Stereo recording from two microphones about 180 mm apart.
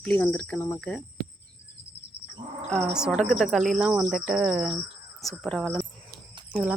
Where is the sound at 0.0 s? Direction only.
5° left (ahead or behind).